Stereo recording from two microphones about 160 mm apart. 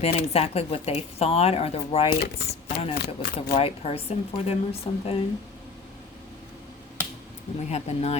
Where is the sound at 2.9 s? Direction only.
80° left.